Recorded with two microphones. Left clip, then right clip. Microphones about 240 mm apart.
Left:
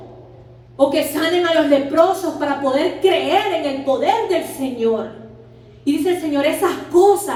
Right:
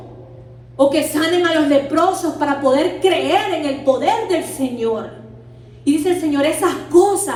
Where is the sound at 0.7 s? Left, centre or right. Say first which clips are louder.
Right 1 dB; right.